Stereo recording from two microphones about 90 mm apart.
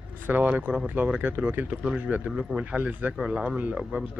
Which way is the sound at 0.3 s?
20° right (ahead or behind).